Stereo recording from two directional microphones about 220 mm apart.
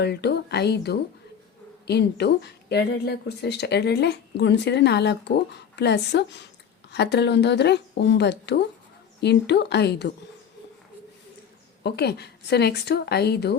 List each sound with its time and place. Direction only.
0.0 s speech: 50° left (ahead or behind)
11.8 s speech: 50° left (ahead or behind)